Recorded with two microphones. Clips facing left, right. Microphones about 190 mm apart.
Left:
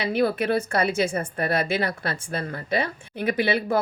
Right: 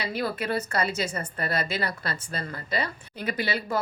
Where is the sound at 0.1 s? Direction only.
60° left (ahead or behind).